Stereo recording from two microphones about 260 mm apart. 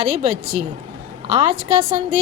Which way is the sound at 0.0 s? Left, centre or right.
Right.